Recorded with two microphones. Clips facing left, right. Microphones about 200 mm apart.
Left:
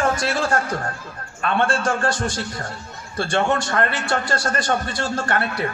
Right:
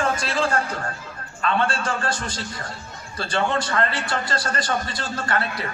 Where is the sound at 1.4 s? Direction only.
50° left (ahead or behind).